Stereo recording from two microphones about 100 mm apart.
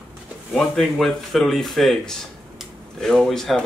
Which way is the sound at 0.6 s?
5° left (ahead or behind).